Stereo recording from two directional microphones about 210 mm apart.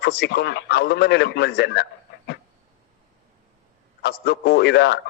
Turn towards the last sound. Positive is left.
turn(degrees=50)  # may be behind; listen again after turning